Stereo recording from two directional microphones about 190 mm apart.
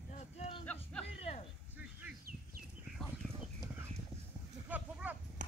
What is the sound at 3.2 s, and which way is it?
Chicken, 5° left (ahead or behind).